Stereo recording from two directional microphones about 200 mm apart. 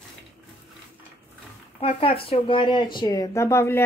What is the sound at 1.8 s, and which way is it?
A woman's voice, 25° left (ahead or behind).